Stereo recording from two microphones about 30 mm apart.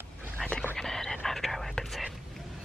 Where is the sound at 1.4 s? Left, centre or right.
Centre.